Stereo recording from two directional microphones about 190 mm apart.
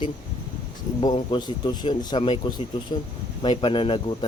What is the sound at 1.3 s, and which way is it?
Speech, 20° left (ahead or behind).